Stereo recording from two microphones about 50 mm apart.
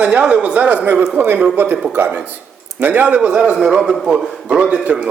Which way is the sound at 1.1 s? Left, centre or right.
Right.